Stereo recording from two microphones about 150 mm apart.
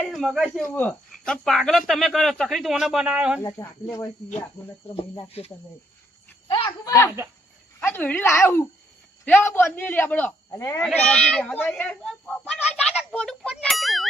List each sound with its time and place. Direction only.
0.0 s speech: centre (ahead or behind)
4.9 s speech: 40° left (ahead or behind)
6.5 s a man's voice: 30° left (ahead or behind); by 10.3 s 10° left (ahead or behind)
10.5 s speech: 20° left (ahead or behind)
10.8 s a child's voice: 5° left (ahead or behind)